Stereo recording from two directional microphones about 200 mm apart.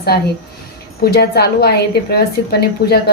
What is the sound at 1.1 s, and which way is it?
A woman's voice, 50° left (ahead or behind).